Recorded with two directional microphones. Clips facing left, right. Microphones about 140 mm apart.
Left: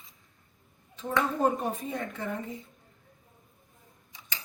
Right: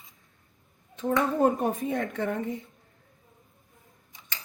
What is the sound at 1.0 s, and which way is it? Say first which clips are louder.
A woman's voice: right 4 dB; 50° right (ahead or behind).